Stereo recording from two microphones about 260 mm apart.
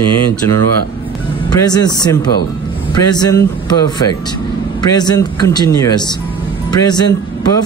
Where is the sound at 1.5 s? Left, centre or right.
Centre.